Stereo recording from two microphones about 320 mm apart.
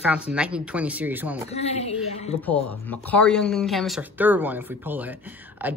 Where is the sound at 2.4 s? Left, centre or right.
Centre.